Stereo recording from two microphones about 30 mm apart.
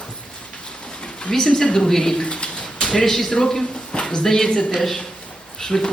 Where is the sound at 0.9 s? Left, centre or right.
Left.